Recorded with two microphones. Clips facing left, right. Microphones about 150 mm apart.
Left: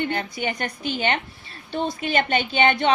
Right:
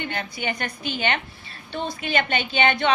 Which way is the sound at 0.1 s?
40° left (ahead or behind).